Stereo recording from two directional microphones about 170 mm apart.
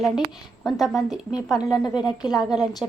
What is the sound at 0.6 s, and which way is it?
A woman's voice, centre (ahead or behind).